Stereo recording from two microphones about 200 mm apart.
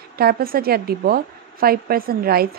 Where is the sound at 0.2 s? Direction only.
50° right (ahead or behind).